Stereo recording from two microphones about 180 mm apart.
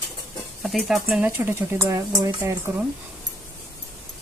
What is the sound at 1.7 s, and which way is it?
Speech, 20° right (ahead or behind).